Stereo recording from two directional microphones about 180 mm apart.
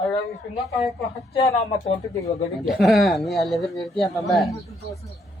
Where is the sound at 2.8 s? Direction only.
Centre (ahead or behind).